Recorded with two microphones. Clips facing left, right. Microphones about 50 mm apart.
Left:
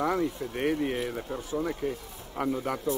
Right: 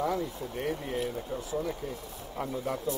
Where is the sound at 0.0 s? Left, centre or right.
Left.